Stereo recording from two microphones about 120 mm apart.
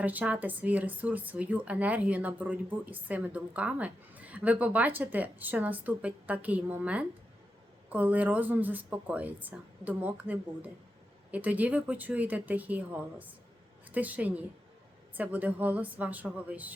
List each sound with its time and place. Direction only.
0.0 s speech: 15° right (ahead or behind)